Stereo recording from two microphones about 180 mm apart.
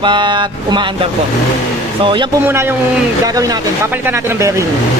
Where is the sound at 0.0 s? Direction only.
25° right (ahead or behind).